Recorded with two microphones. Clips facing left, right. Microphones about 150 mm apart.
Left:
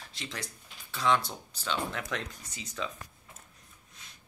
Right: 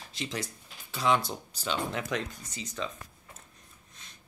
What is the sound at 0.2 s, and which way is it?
Speech, 15° right (ahead or behind).